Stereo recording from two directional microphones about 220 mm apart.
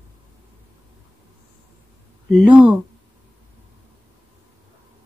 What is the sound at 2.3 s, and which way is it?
Speech, 5° right (ahead or behind).